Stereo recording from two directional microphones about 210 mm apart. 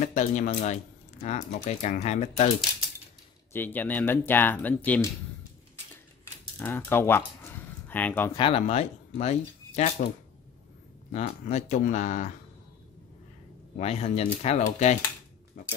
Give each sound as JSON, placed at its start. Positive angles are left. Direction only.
{"t": 0.0, "sound": "speech", "side_deg": 35}
{"t": 3.5, "sound": "speech", "side_deg": 10}
{"t": 6.6, "sound": "speech", "side_deg": 10}
{"t": 8.4, "sound": "speech", "side_deg": 25}
{"t": 11.1, "sound": "speech", "side_deg": 35}
{"t": 13.7, "sound": "speech", "side_deg": 30}
{"t": 15.6, "sound": "a sound", "side_deg": 35}